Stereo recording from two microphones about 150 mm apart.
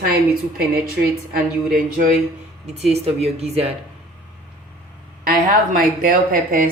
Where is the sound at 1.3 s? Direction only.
70° right (ahead or behind).